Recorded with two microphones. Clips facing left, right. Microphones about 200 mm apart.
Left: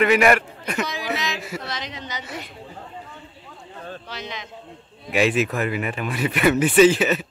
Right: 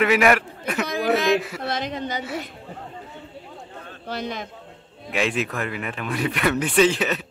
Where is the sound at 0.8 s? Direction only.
55° right (ahead or behind).